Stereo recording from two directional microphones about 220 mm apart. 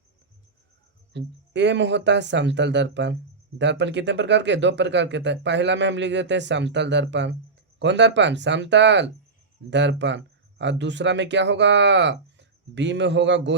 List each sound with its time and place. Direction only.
1.1 s speech: 55° right (ahead or behind)